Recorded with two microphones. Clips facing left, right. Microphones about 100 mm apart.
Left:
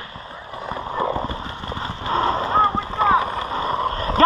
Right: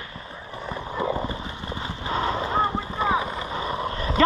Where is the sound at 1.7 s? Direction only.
45° left (ahead or behind).